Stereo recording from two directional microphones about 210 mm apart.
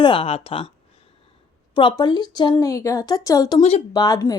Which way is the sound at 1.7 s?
20° left (ahead or behind).